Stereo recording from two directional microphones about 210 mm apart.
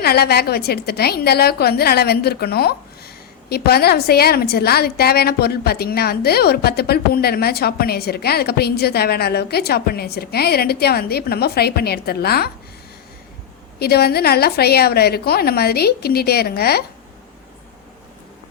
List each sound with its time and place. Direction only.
0.0 s a woman's voice: 50° left (ahead or behind)
13.7 s a woman's voice: 50° left (ahead or behind)